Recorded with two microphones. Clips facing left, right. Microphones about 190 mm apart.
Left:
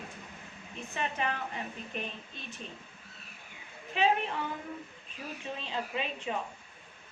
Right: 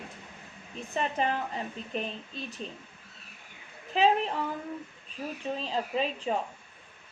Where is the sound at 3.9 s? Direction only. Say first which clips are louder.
Right 4 dB; 35° right (ahead or behind).